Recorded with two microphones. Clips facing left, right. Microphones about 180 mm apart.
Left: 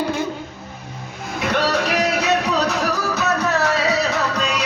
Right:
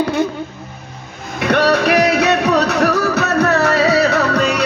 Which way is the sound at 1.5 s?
65° right (ahead or behind).